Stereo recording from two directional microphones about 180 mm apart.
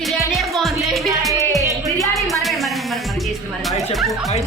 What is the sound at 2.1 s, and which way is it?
Music, centre (ahead or behind).